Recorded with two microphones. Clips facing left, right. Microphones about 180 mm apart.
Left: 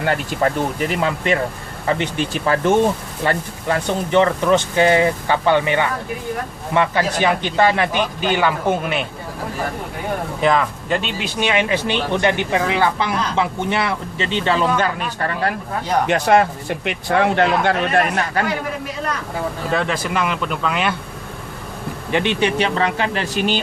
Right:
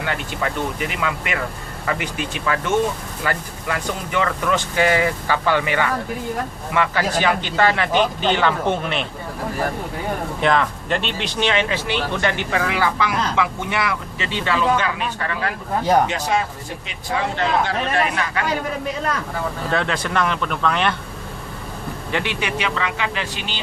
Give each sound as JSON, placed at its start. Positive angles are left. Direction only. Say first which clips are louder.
{"t": 0.0, "sound": "speech", "louder": "left 6 dB", "side_deg": 45}
{"t": 10.4, "sound": "speech", "louder": "left 1 dB", "side_deg": 5}
{"t": 14.9, "sound": "speech", "louder": "left 2 dB", "side_deg": 45}
{"t": 16.0, "sound": "speech", "louder": "left 7 dB", "side_deg": 60}
{"t": 18.1, "sound": "speech", "louder": "left 3 dB", "side_deg": 40}
{"t": 19.7, "sound": "speech", "louder": "left 1 dB", "side_deg": 5}
{"t": 22.1, "sound": "speech", "louder": "left 6 dB", "side_deg": 20}